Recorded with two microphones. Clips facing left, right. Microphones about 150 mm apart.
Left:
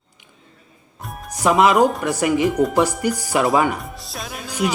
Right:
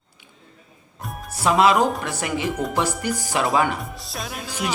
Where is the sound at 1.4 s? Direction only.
15° left (ahead or behind).